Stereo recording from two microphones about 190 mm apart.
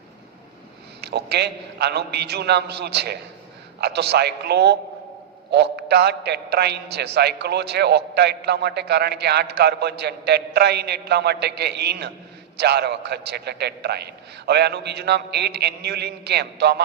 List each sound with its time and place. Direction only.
1.0 s a man's voice: 60° right (ahead or behind)